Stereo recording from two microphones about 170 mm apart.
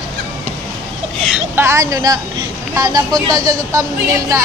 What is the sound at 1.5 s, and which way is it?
Speech, 15° right (ahead or behind).